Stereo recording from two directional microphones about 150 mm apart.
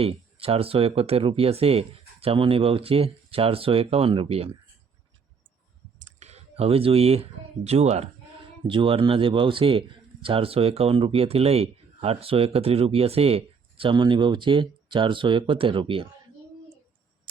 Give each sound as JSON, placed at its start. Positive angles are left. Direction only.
{"t": 0.0, "sound": "speech", "side_deg": -40}
{"t": 6.0, "sound": "speech", "side_deg": -45}
{"t": 8.6, "sound": "speech", "side_deg": -35}